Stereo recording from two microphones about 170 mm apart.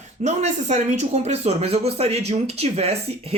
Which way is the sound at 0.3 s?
45° right (ahead or behind).